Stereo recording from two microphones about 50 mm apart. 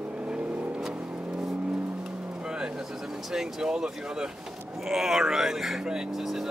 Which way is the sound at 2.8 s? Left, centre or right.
Centre.